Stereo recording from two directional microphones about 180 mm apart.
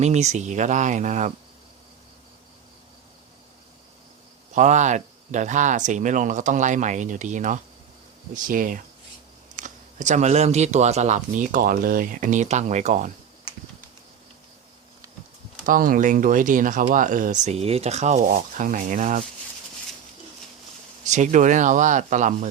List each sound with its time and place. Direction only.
0.0 s speech: 40° right (ahead or behind)
4.5 s speech: 40° right (ahead or behind)
15.6 s speech: 50° right (ahead or behind)
21.0 s speech: 40° right (ahead or behind)